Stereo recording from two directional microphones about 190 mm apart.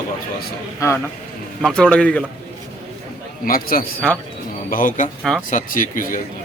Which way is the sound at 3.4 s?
50° left (ahead or behind).